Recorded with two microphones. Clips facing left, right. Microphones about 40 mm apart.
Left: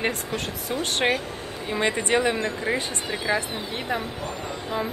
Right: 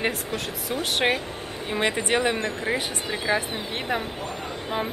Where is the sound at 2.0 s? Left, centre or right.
Centre.